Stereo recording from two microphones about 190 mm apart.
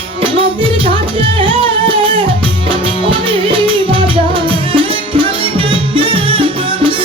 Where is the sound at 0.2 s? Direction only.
25° right (ahead or behind).